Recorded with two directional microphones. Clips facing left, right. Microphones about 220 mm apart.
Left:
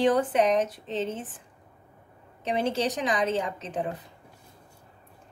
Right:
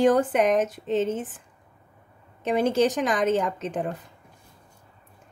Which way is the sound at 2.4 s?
50° right (ahead or behind).